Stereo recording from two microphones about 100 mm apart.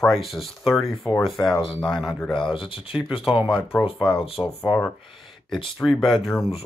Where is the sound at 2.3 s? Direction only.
60° left (ahead or behind).